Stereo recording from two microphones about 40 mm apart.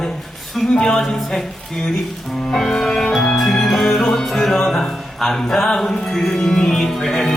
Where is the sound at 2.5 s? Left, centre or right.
Centre.